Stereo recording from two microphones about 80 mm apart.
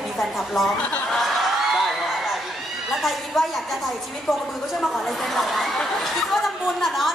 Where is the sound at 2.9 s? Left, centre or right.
Centre.